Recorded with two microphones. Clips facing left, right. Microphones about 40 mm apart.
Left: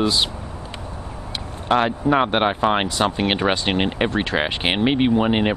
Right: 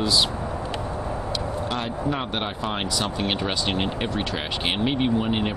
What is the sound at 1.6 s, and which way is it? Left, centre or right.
Speech, left.